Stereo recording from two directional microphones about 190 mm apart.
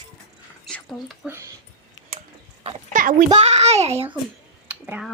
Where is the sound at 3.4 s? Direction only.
35° right (ahead or behind).